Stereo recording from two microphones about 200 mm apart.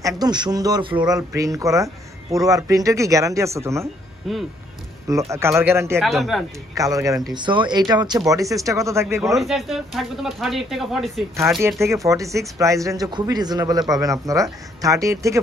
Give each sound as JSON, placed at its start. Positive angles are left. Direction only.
{"t": 0.0, "sound": "speech", "side_deg": -20}
{"t": 4.2, "sound": "speech", "side_deg": 0}
{"t": 5.3, "sound": "speech", "side_deg": -15}
{"t": 5.9, "sound": "speech", "side_deg": 0}
{"t": 6.7, "sound": "speech", "side_deg": -15}
{"t": 9.3, "sound": "speech", "side_deg": 0}
{"t": 11.6, "sound": "speech", "side_deg": -15}